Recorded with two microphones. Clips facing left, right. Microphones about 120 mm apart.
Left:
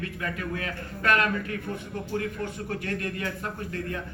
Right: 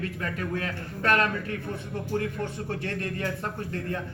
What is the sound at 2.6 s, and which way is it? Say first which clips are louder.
Speech: even; 30° right (ahead or behind).